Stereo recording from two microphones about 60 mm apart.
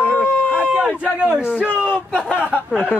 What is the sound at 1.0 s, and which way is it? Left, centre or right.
Speech, centre.